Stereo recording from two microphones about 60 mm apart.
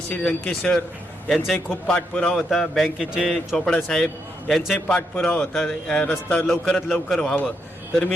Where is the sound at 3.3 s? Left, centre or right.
Centre.